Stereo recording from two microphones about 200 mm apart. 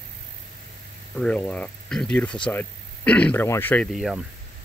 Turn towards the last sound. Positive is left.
turn(degrees=0)  # may be behind; listen again after turning